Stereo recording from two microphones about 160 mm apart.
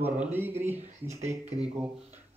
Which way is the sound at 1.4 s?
40° right (ahead or behind).